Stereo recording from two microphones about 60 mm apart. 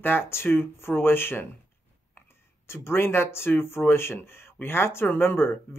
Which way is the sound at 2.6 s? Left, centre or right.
Left.